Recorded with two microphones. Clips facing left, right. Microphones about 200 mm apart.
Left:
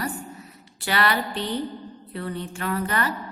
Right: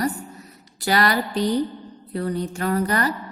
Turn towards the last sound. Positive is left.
turn(degrees=-40)  # may be behind; listen again after turning